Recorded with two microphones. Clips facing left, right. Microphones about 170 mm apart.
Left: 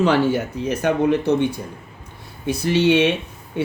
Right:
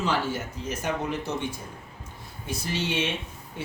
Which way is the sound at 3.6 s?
70° left (ahead or behind).